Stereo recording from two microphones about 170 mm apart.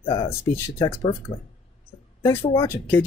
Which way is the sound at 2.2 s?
15° left (ahead or behind).